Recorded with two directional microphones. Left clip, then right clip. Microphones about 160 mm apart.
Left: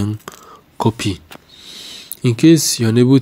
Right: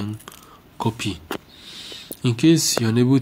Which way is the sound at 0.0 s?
40° left (ahead or behind).